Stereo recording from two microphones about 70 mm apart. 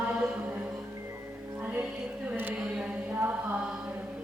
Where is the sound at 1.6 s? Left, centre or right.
Right.